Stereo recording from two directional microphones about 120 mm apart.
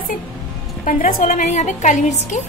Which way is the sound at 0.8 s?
90° left.